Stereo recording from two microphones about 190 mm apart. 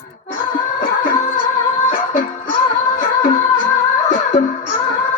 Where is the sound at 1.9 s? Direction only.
45° left (ahead or behind).